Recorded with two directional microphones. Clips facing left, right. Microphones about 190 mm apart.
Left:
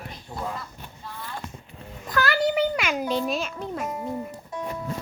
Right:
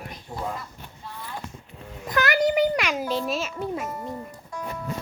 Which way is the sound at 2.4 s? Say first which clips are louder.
Right 2 dB; centre (ahead or behind).